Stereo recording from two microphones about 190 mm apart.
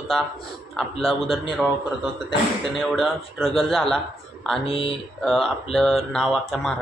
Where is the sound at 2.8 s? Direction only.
Centre (ahead or behind).